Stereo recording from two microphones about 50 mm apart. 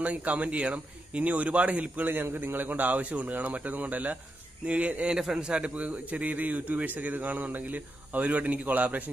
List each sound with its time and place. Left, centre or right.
0.0 s speech: right
2.0 s a man's voice: right
5.1 s a man's voice: centre; by 9.1 s right